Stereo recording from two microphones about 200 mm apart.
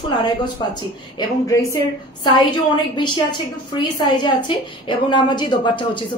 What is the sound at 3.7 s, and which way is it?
Speech, 20° left (ahead or behind).